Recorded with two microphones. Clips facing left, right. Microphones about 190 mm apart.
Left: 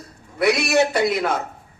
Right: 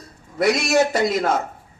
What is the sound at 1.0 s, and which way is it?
Speech, 50° right (ahead or behind).